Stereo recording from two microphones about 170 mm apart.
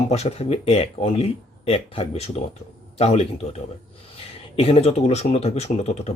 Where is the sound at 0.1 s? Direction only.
35° left (ahead or behind).